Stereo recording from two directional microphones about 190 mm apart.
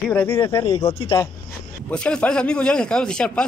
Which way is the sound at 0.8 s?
35° left (ahead or behind).